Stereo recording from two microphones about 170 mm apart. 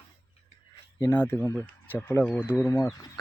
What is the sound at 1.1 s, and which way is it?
Speech, 10° left (ahead or behind).